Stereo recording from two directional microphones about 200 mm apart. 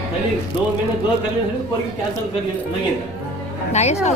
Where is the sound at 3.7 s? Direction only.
35° left (ahead or behind).